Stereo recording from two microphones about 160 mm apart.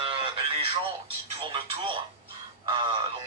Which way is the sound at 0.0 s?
35° right (ahead or behind).